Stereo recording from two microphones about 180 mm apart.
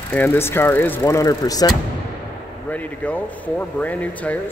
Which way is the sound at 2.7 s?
10° left (ahead or behind).